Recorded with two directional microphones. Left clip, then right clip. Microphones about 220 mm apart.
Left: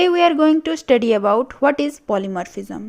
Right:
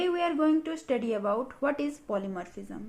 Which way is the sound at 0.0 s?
45° left (ahead or behind).